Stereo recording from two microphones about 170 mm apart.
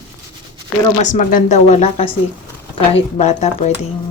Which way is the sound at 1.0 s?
45° left (ahead or behind).